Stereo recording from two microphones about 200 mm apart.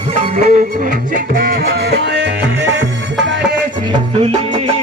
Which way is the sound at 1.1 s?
45° right (ahead or behind).